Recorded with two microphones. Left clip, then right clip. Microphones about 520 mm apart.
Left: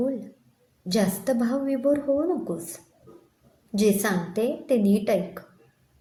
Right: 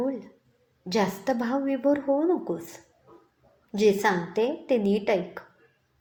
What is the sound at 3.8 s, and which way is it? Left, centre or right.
A woman's voice, left.